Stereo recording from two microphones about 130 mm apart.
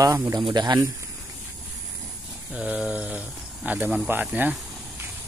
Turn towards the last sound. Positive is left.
turn(degrees=-15)  # may be behind; listen again after turning